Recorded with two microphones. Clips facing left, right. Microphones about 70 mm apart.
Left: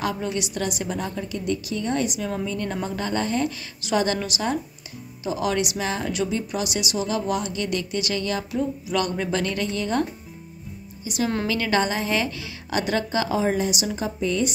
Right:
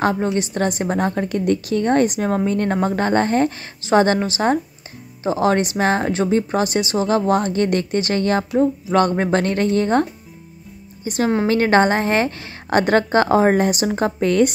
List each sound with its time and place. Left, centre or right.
0.0 s a woman's voice: right
11.1 s a woman's voice: right